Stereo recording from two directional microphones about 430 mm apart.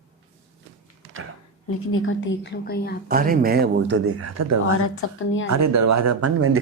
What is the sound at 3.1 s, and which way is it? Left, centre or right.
Speech, centre.